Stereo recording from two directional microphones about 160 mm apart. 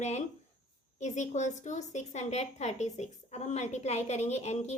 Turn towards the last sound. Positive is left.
turn(degrees=40)  # may be behind; listen again after turning